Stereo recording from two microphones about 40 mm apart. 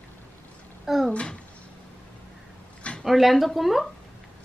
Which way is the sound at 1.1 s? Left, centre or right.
Left.